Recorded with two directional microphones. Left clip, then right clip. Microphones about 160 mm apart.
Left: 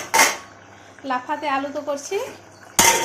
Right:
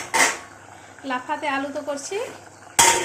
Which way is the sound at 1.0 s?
Centre (ahead or behind).